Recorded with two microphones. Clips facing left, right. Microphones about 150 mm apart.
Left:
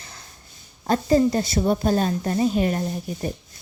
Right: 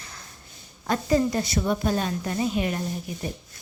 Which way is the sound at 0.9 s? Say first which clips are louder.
Left 4 dB; 30° left (ahead or behind).